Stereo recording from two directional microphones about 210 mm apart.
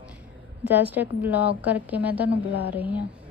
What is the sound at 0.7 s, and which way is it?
A woman's voice, 10° right (ahead or behind).